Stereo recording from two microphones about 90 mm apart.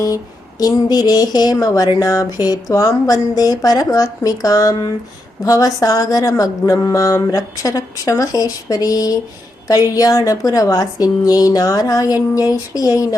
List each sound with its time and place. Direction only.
0.6 s speech: 45° left (ahead or behind)